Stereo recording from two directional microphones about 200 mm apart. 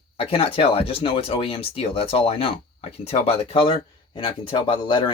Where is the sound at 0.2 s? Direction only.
30° left (ahead or behind).